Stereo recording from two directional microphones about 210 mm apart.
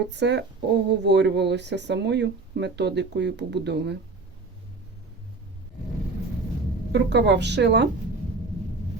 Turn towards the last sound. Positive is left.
turn(degrees=-55)  # may be behind; listen again after turning